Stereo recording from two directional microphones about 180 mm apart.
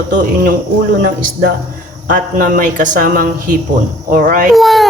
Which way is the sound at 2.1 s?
50° right (ahead or behind).